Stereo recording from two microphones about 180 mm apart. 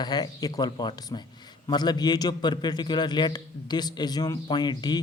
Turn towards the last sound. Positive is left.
turn(degrees=25)  # may be behind; listen again after turning